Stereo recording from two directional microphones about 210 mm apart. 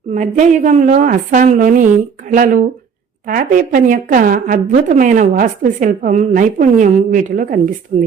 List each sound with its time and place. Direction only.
0.1 s a woman's voice: 35° right (ahead or behind)